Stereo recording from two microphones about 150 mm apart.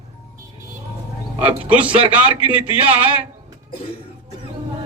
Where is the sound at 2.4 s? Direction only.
10° right (ahead or behind).